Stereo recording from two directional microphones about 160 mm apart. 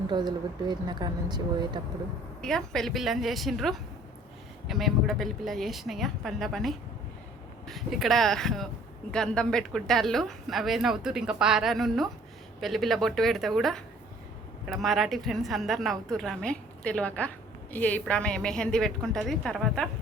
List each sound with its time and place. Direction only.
0.1 s speech: 25° right (ahead or behind)
2.4 s a woman's voice: 5° left (ahead or behind)